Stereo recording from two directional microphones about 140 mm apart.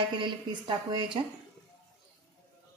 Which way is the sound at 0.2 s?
35° right (ahead or behind).